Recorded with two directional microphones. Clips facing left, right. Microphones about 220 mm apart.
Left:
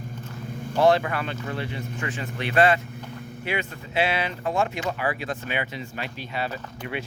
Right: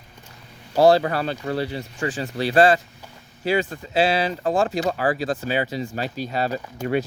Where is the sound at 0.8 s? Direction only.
35° right (ahead or behind).